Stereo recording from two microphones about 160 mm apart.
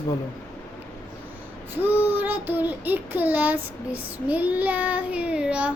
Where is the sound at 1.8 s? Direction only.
10° right (ahead or behind).